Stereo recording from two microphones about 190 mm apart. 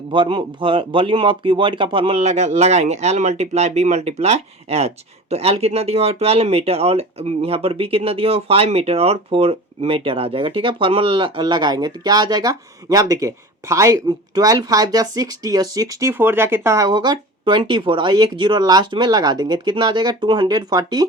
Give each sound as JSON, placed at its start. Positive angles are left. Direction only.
{"t": 0.1, "sound": "speech", "side_deg": -25}